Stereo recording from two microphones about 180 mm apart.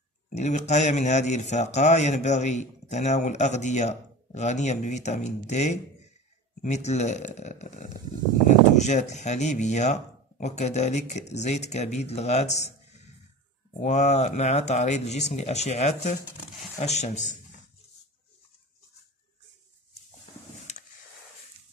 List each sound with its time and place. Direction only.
0.4 s a man's voice: 40° left (ahead or behind)